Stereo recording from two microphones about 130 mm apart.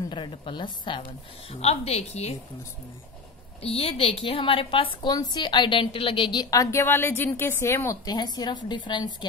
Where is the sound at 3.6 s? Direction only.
50° left (ahead or behind).